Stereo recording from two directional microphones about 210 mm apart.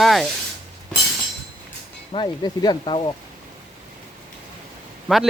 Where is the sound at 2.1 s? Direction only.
20° left (ahead or behind).